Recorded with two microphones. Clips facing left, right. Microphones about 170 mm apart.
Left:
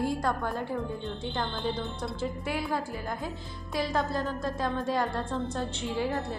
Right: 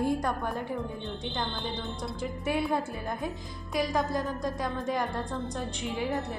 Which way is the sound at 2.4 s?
20° right (ahead or behind).